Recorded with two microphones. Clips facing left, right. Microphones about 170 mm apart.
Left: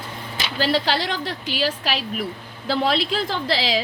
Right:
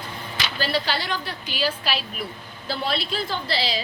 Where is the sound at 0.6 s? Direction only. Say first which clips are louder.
Left 5 dB; 90° left.